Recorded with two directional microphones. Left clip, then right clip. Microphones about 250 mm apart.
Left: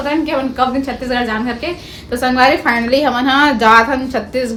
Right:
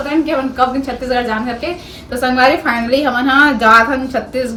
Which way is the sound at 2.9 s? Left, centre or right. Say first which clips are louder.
Right 2 dB; centre.